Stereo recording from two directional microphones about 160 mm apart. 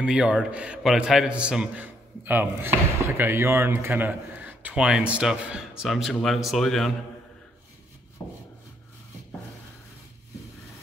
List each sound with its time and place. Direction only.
0.0 s a man's voice: 5° right (ahead or behind)